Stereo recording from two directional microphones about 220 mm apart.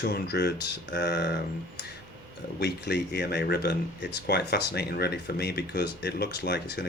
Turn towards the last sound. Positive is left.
turn(degrees=50)  # may be behind; listen again after turning